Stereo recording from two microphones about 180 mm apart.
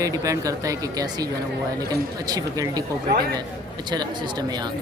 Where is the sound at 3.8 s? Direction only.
25° right (ahead or behind).